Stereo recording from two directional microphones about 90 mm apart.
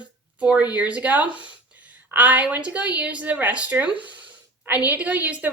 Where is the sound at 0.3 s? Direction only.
15° right (ahead or behind).